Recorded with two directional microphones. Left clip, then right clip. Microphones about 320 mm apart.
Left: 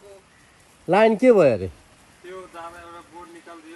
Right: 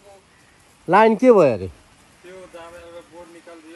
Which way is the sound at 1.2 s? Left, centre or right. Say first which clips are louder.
Right 2 dB; centre.